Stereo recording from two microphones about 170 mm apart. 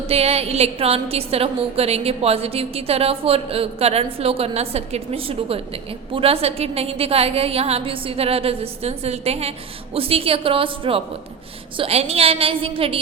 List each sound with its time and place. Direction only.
0.1 s a woman's voice: 35° right (ahead or behind)